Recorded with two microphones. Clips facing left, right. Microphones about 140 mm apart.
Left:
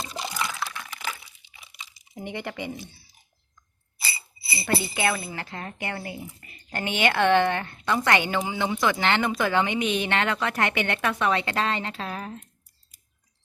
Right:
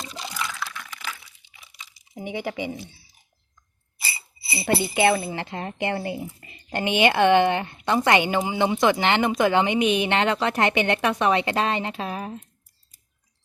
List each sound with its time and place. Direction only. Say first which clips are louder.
0.0 s a sound: left 2 dB; 35° left (ahead or behind)
2.1 s speech: right 4 dB; 10° right (ahead or behind)
4.4 s speech: right 3 dB; 25° right (ahead or behind)